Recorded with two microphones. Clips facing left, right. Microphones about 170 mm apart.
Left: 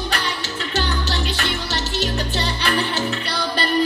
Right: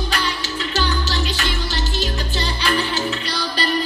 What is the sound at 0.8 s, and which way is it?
Music, 60° left (ahead or behind).